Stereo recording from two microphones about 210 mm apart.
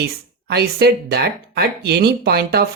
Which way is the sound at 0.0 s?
50° right (ahead or behind).